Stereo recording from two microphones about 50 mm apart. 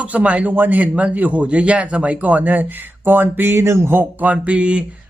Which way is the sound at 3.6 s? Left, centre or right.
Right.